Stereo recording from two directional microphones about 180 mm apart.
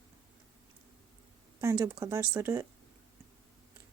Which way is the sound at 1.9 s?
15° right (ahead or behind).